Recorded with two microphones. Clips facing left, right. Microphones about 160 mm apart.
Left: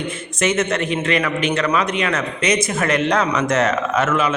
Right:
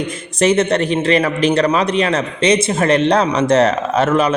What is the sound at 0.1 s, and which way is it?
A man's voice, 35° right (ahead or behind).